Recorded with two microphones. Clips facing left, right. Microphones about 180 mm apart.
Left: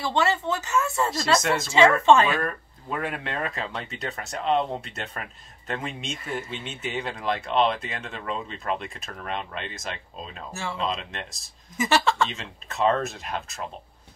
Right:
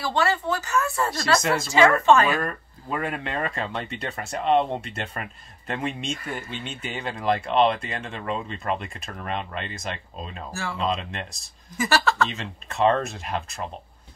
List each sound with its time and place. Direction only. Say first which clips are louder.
0.0 s speech: even; 20° left (ahead or behind)
1.4 s speech: even; centre (ahead or behind)
10.5 s speech: even; 25° left (ahead or behind)
10.8 s speech: right 4 dB; centre (ahead or behind)
11.7 s speech: even; 20° left (ahead or behind)
12.3 s speech: right 3 dB; centre (ahead or behind)